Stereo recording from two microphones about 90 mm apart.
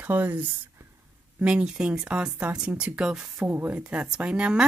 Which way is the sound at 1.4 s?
10° right (ahead or behind).